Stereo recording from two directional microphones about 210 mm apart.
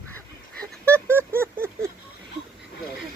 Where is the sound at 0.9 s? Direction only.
10° right (ahead or behind).